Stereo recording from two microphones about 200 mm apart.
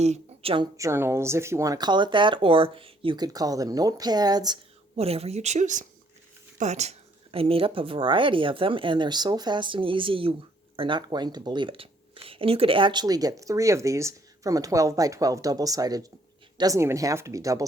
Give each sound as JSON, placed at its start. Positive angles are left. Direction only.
{"t": 0.0, "sound": "speech", "side_deg": -30}
{"t": 4.9, "sound": "speech", "side_deg": -30}